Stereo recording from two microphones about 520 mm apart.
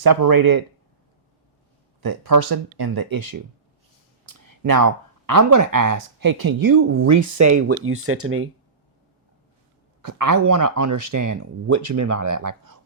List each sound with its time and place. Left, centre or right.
0.0 s speech: right
2.0 s speech: right
6.7 s speech: right
10.0 s speech: right